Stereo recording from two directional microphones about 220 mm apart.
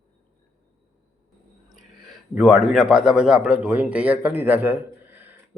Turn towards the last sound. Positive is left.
turn(degrees=-10)  # may be behind; listen again after turning